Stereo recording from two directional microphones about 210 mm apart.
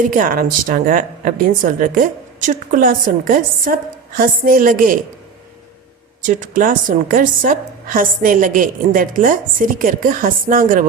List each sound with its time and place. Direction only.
0.0 s a woman's voice: 40° right (ahead or behind)
6.2 s a woman's voice: 40° right (ahead or behind)